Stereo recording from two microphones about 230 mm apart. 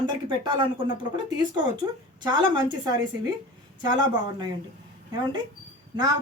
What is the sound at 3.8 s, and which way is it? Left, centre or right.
Speech, centre.